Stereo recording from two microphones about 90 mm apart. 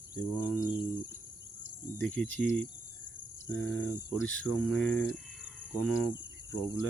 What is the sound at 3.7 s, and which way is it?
Cricket, 15° left (ahead or behind).